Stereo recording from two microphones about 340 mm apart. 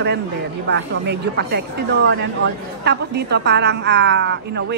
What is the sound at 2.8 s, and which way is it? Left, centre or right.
A woman's voice, right.